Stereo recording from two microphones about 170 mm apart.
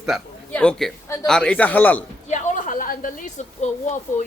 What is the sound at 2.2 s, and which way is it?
A woman's voice, 45° left (ahead or behind).